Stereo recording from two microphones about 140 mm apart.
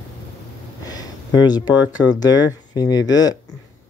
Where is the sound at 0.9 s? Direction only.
30° left (ahead or behind).